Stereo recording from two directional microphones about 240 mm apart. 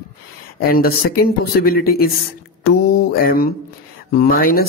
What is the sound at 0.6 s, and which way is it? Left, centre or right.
Speech, left.